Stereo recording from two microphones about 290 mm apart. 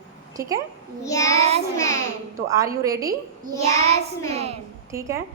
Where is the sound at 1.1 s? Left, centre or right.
Centre.